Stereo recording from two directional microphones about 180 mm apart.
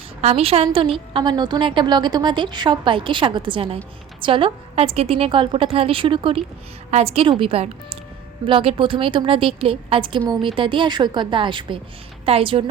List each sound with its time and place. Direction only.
0.2 s a woman's voice: 35° right (ahead or behind)